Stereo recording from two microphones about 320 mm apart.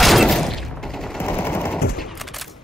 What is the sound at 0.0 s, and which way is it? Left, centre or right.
Machine gun, centre.